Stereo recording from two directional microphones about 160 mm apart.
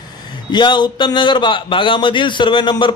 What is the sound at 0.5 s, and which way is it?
A man's voice, 30° left (ahead or behind).